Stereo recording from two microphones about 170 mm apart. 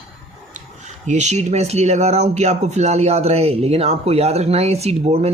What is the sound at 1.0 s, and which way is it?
Speech, 40° right (ahead or behind).